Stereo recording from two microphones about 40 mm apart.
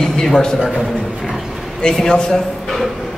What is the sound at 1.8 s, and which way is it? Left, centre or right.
Speech, centre.